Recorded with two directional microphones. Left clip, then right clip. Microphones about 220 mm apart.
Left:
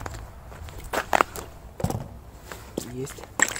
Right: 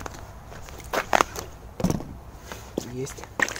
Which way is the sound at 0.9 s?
Centre (ahead or behind).